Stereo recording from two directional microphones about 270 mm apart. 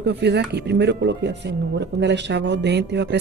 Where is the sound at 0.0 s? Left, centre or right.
Right.